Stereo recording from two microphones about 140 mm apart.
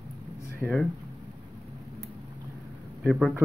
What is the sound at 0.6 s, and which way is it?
Speech, 10° left (ahead or behind).